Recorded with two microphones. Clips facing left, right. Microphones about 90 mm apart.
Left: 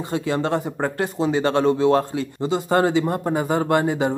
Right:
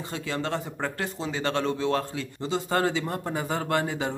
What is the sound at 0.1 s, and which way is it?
Speech, 20° left (ahead or behind).